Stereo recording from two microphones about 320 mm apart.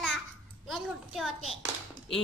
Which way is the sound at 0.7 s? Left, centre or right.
Centre.